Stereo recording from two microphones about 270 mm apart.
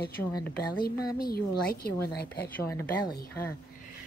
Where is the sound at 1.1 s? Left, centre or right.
Left.